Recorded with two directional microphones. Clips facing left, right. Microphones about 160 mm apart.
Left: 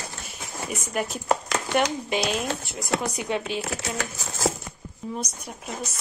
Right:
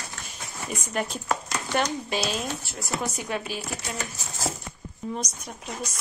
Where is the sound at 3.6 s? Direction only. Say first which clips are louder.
Left 3 dB; 90° left.